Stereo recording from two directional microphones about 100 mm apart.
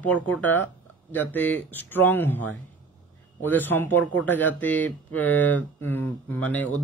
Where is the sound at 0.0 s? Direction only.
15° left (ahead or behind).